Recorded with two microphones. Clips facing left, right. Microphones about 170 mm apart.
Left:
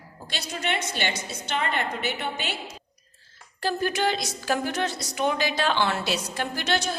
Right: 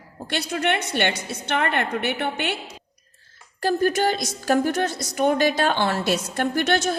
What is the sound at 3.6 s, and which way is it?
A woman's voice, 45° right (ahead or behind).